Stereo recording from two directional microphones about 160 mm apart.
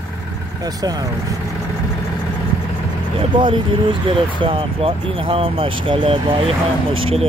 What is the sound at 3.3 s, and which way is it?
Speech, 30° right (ahead or behind).